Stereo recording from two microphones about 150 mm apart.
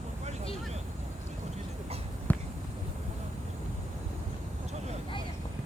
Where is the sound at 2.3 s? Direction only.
10° left (ahead or behind).